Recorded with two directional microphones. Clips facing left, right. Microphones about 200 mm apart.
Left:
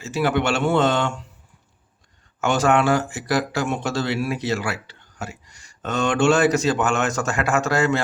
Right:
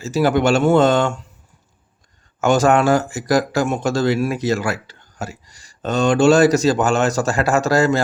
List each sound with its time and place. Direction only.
0.0 s speech: 40° right (ahead or behind)
2.4 s speech: 45° right (ahead or behind)